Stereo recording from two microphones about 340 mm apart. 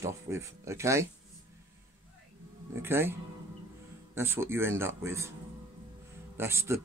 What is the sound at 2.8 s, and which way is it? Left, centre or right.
Speech, centre.